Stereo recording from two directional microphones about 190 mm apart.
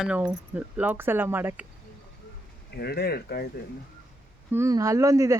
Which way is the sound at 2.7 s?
55° left (ahead or behind).